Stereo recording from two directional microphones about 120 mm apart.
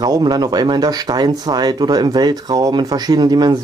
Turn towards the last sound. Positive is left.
turn(degrees=-35)  # may be behind; listen again after turning